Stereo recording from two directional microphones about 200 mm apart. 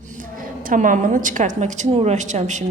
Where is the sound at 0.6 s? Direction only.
40° right (ahead or behind).